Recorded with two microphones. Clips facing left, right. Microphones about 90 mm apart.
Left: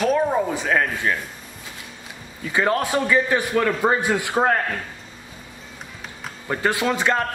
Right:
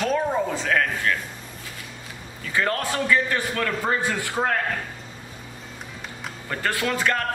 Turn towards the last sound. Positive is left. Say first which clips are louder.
# left 3 dB
turn(degrees=20)  # may be behind; listen again after turning